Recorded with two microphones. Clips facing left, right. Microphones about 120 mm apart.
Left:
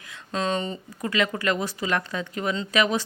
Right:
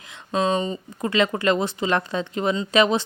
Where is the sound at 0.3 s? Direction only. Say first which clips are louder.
Right 5 dB; 15° right (ahead or behind).